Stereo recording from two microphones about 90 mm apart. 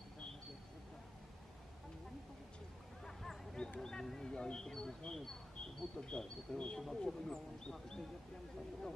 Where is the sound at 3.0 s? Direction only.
5° left (ahead or behind).